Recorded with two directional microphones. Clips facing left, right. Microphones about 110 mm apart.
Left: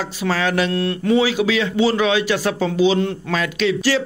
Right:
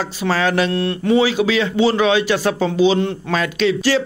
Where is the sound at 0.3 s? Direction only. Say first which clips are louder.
Right 2 dB; 35° right (ahead or behind).